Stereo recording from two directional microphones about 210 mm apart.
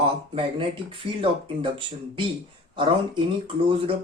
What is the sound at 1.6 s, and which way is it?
Speech, 25° right (ahead or behind).